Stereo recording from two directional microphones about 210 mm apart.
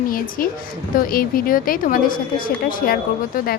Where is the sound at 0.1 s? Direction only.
40° left (ahead or behind).